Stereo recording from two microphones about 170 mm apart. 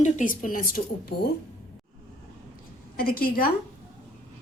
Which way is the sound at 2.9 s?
60° left (ahead or behind).